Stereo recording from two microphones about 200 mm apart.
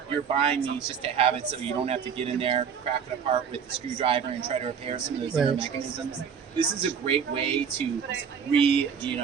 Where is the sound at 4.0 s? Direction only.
25° right (ahead or behind).